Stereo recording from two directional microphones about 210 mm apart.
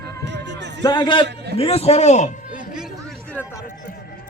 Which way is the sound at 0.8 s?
20° left (ahead or behind).